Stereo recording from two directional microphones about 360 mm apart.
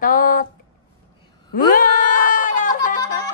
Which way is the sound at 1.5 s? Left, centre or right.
Left.